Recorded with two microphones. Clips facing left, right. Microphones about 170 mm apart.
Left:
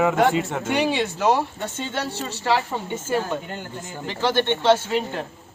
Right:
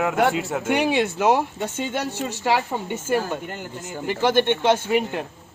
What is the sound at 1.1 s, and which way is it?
Speech, 15° right (ahead or behind).